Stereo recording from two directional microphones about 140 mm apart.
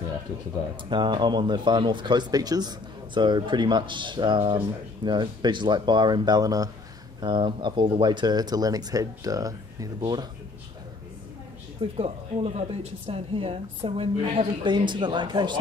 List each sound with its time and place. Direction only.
0.8 s speech: 35° right (ahead or behind)
11.8 s speech: 45° right (ahead or behind)